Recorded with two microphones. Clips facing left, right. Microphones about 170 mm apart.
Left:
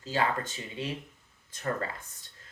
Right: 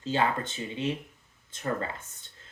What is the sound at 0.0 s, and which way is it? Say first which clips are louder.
Speech: right 2 dB; 25° right (ahead or behind).